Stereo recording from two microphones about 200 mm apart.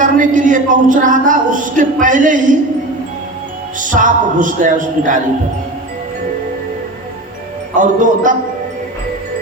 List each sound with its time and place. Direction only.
0.0 s a woman's voice: 40° right (ahead or behind)
3.8 s a woman's voice: 40° right (ahead or behind)
7.8 s a woman's voice: 40° right (ahead or behind)